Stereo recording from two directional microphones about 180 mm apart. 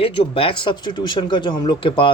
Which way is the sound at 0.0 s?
30° left (ahead or behind).